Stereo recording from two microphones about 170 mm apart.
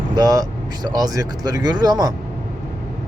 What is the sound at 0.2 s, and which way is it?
Speech, 25° right (ahead or behind).